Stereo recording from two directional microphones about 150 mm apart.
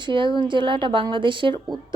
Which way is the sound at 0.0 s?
30° right (ahead or behind).